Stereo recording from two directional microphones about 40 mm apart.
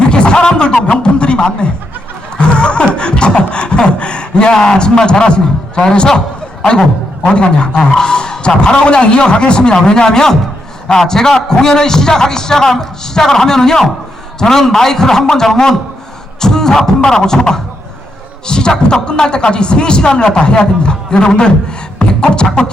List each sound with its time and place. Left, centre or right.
0.1 s speech: left
2.4 s beatboxing: left
4.5 s a man's voice: left
7.3 s a man's voice: left
21.9 s beatboxing: left